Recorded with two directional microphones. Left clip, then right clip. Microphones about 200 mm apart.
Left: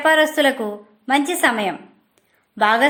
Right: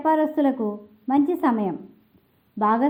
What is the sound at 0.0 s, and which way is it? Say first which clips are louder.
A woman's voice: left 6 dB; 40° left (ahead or behind).